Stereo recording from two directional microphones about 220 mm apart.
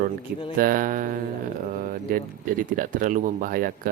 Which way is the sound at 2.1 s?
40° right (ahead or behind).